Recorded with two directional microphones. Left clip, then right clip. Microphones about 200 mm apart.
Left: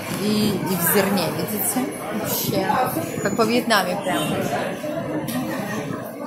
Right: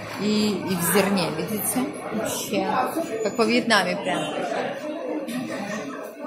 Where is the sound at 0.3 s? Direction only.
Centre (ahead or behind).